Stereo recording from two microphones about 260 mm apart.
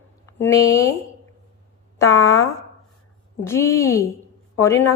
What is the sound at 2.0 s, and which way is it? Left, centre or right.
A woman's voice, centre.